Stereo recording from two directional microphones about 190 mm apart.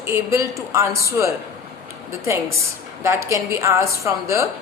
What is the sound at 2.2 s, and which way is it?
A woman's voice, 15° right (ahead or behind).